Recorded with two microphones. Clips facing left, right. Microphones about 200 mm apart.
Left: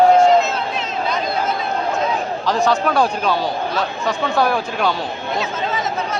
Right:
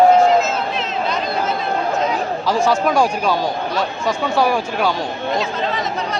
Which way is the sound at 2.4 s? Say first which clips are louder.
Right 1 dB; 10° right (ahead or behind).